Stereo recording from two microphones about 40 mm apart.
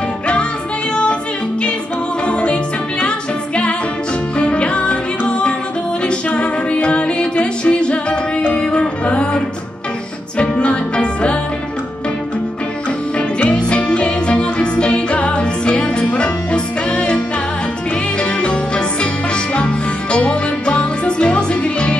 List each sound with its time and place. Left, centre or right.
2.2 s music: left
13.4 s music: left
18.2 s music: left